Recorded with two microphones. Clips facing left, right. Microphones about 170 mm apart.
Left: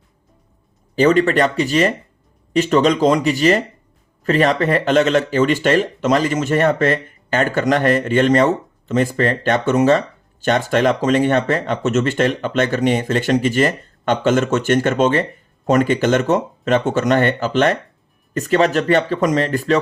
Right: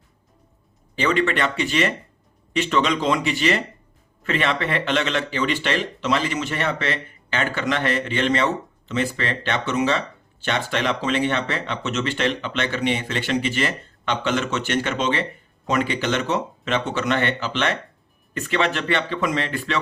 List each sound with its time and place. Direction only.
0.9 s speech: 40° left (ahead or behind)